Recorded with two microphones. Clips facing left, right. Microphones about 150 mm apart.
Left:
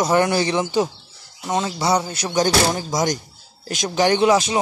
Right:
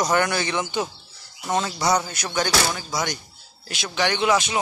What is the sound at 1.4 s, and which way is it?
Speech, 15° left (ahead or behind).